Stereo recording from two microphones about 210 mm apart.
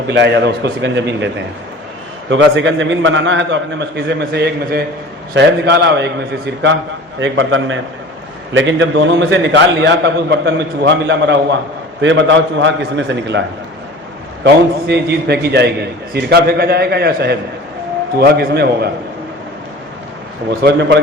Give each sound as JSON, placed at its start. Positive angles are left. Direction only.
{"t": 0.1, "sound": "a man's voice", "side_deg": -55}
{"t": 2.3, "sound": "a man's voice", "side_deg": -60}
{"t": 14.4, "sound": "a man's voice", "side_deg": -50}
{"t": 20.7, "sound": "a man's voice", "side_deg": -55}